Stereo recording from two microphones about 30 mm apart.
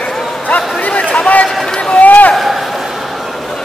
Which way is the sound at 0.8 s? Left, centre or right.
Left.